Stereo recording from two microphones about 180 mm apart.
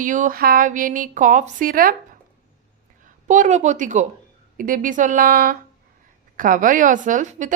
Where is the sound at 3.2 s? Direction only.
45° right (ahead or behind).